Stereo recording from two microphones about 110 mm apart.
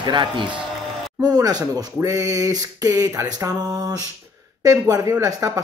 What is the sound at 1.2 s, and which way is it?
Speech, 35° right (ahead or behind).